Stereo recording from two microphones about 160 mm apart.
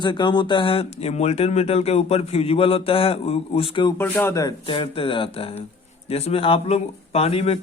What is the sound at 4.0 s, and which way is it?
Speech, 15° left (ahead or behind).